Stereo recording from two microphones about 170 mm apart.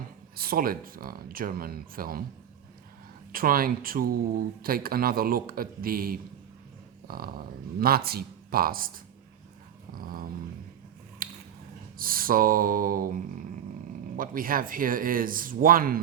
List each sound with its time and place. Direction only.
0.3 s speech: 60° right (ahead or behind)
3.3 s speech: 55° right (ahead or behind)
9.9 s speech: 55° right (ahead or behind)
11.2 s a sound: 55° right (ahead or behind)
11.9 s speech: 55° right (ahead or behind)
14.2 s speech: 55° right (ahead or behind)